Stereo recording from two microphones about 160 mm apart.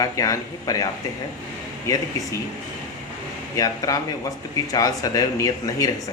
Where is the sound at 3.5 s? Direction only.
20° left (ahead or behind).